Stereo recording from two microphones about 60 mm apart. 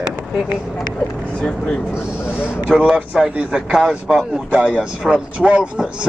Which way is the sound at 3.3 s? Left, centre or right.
Centre.